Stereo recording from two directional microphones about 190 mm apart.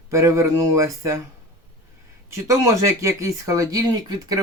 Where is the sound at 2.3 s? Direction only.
15° right (ahead or behind).